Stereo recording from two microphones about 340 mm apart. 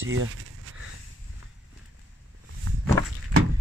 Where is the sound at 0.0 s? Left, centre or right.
Right.